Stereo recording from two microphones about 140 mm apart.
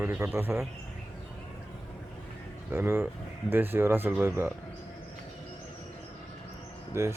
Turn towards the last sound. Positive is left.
turn(degrees=-20)  # may be behind; listen again after turning